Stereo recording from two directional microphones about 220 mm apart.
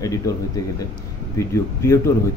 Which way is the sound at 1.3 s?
15° left (ahead or behind).